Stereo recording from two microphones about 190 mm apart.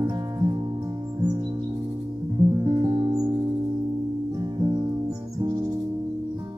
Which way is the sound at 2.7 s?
20° right (ahead or behind).